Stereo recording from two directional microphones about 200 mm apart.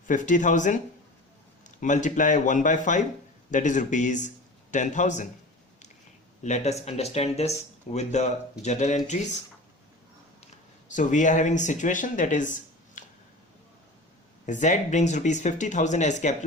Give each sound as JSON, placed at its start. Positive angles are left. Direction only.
{"t": 0.1, "sound": "speech", "side_deg": 40}
{"t": 6.4, "sound": "speech", "side_deg": 35}
{"t": 10.4, "sound": "speech", "side_deg": 40}
{"t": 14.4, "sound": "speech", "side_deg": 40}